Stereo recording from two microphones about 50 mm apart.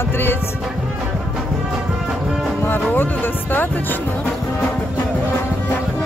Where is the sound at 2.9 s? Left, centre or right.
Left.